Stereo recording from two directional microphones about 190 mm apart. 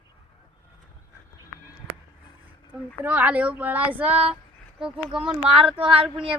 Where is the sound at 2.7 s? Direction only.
10° right (ahead or behind).